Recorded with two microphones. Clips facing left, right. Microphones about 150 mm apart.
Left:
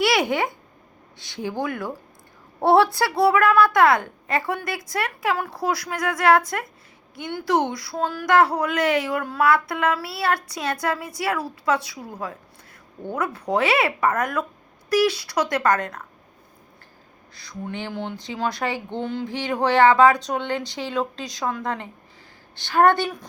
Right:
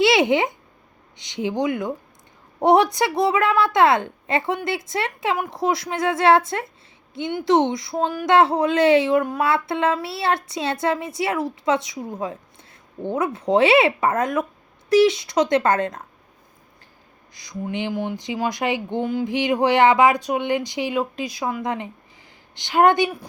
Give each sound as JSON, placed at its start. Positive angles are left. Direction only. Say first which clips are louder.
{"t": 0.0, "sound": "a child's voice", "louder": "right 4 dB", "side_deg": -25}
{"t": 17.3, "sound": "speech", "louder": "right 4 dB", "side_deg": -15}